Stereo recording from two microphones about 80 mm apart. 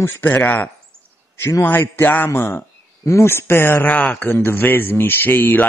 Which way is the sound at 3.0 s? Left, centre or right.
Left.